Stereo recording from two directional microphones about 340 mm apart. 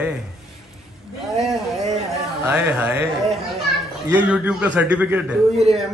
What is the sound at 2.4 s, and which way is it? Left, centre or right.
A woman's voice, centre.